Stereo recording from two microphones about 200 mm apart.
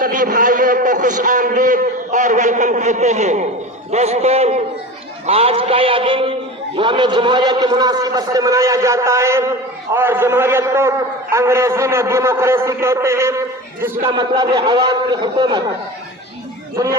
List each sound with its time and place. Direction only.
0.0 s a man's voice: 45° right (ahead or behind); by 14.1 s 10° right (ahead or behind)
14.1 s a man's voice: 25° right (ahead or behind)